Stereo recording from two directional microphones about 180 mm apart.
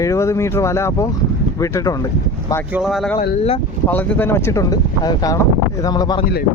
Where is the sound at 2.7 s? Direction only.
Centre (ahead or behind).